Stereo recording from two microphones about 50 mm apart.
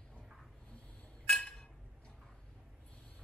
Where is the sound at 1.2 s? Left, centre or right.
Centre.